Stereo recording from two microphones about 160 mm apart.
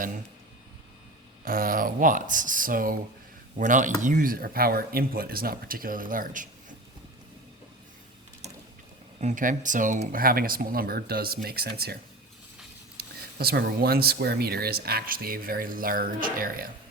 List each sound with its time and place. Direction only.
1.5 s speech: 60° right (ahead or behind)
9.2 s speech: 55° right (ahead or behind); by 11.9 s 80° right
13.0 s speech: 75° right (ahead or behind)